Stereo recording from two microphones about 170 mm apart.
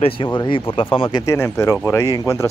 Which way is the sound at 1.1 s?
15° left (ahead or behind).